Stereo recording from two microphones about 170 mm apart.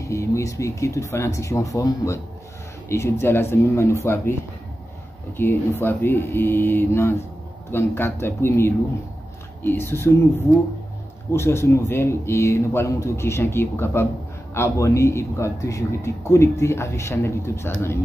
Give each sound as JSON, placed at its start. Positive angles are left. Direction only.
{"t": 0.0, "sound": "a man's voice", "side_deg": 15}
{"t": 5.4, "sound": "a man's voice", "side_deg": 10}
{"t": 11.3, "sound": "a man's voice", "side_deg": 15}